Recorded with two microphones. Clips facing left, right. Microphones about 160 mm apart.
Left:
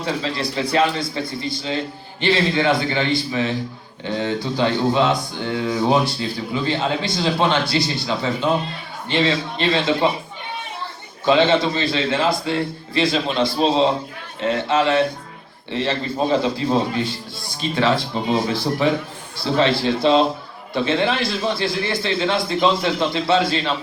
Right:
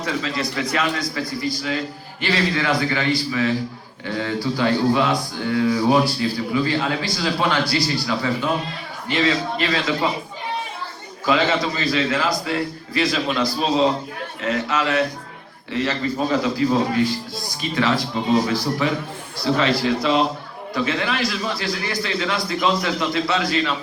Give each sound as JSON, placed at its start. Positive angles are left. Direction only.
{"t": 0.0, "sound": "speech", "side_deg": 30}
{"t": 11.3, "sound": "speech", "side_deg": 25}